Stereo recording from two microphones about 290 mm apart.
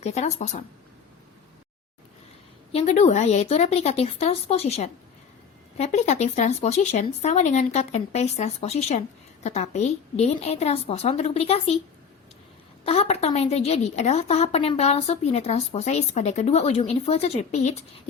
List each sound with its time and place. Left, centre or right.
0.0 s speech: left
2.7 s speech: left
12.8 s speech: left